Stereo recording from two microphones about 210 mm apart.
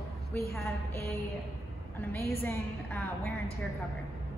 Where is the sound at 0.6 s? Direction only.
10° left (ahead or behind).